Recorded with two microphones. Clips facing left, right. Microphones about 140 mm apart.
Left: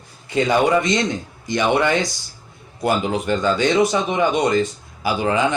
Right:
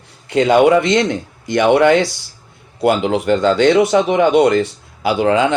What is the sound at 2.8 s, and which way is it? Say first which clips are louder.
Speech: right 5 dB; 80° right.